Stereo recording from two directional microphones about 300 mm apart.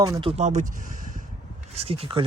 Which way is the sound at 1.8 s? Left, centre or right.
Centre.